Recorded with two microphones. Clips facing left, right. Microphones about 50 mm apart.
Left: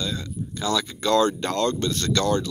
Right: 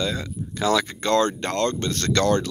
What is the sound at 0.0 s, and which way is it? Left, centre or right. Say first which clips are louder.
Speech: right 3 dB; right.